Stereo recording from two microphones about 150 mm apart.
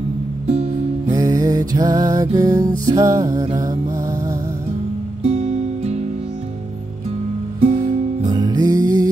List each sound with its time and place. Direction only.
0.5 s music: 45° right (ahead or behind)
1.1 s music: 25° right (ahead or behind)
5.2 s music: 45° right (ahead or behind)
7.6 s music: 55° right (ahead or behind)
8.3 s music: 25° right (ahead or behind)